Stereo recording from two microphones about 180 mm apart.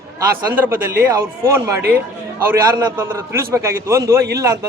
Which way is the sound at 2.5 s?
15° right (ahead or behind).